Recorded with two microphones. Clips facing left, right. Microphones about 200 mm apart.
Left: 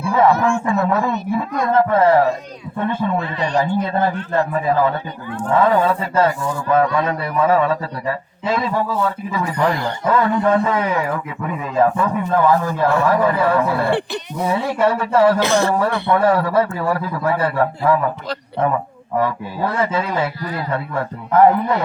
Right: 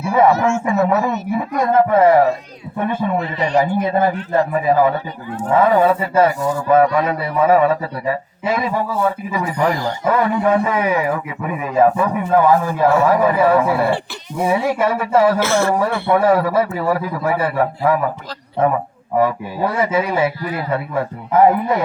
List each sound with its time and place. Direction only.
0.6 s a man's voice: 15° right (ahead or behind)
15.4 s speech: 15° left (ahead or behind)
16.0 s a man's voice: 10° right (ahead or behind)
19.1 s a man's voice: 10° right (ahead or behind)